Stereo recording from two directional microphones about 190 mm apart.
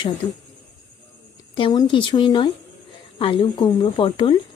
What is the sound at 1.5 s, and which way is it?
Speech, 25° left (ahead or behind).